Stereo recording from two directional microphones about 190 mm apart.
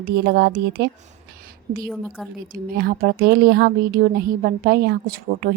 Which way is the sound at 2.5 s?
50° right (ahead or behind).